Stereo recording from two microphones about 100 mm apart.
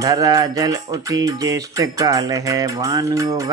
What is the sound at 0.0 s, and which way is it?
Speech, 35° right (ahead or behind).